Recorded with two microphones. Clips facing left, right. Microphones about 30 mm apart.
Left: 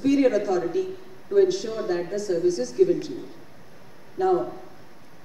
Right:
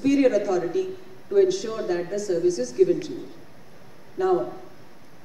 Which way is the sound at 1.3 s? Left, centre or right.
Centre.